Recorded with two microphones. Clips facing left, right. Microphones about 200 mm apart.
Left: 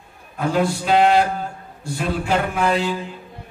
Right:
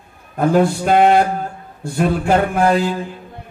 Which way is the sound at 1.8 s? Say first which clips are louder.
Right 6 dB; 55° right (ahead or behind).